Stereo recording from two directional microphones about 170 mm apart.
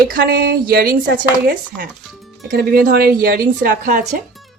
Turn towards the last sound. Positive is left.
turn(degrees=-50)  # may be behind; listen again after turning